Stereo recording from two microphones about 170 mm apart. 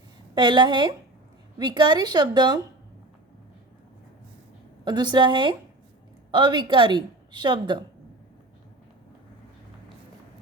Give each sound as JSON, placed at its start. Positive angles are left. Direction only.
{"t": 0.3, "sound": "a woman's voice", "side_deg": -25}
{"t": 4.9, "sound": "a woman's voice", "side_deg": -25}